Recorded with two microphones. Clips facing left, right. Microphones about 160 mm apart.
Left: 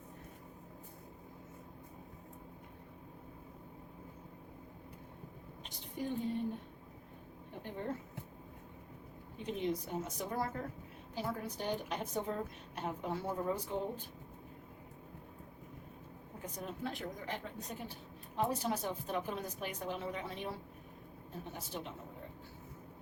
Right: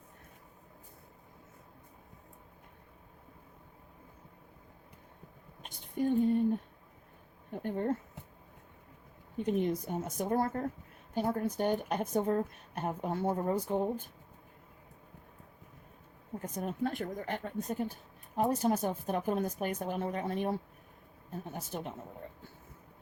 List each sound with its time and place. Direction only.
5.6 s a sound: 50° right (ahead or behind)
7.6 s speech: 50° right (ahead or behind)
9.5 s a woman's voice: 50° right (ahead or behind)
16.4 s a woman's voice: 50° right (ahead or behind)